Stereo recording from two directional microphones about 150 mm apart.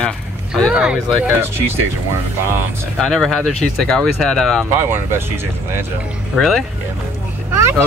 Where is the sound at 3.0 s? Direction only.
5° left (ahead or behind).